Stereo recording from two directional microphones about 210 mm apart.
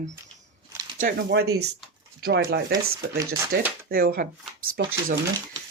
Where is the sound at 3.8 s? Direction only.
45° right (ahead or behind).